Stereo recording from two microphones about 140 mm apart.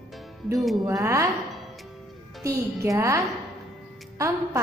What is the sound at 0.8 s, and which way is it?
Speech, 20° right (ahead or behind).